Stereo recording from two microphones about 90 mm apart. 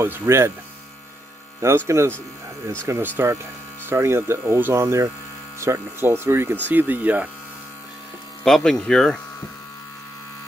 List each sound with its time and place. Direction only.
0.0 s speech: 30° right (ahead or behind)
1.9 s speech: 30° right (ahead or behind)
8.5 s speech: 5° left (ahead or behind)